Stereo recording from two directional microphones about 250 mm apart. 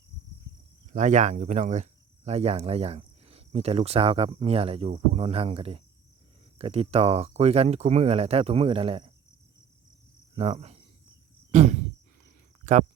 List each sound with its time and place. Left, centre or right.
0.9 s speech: right
10.3 s speech: right
11.5 s a sound: right